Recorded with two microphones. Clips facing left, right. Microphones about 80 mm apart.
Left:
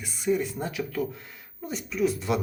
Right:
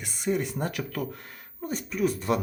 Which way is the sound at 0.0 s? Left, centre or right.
Right.